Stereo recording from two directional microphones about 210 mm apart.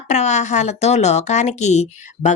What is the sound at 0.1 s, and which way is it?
Speech, 35° left (ahead or behind).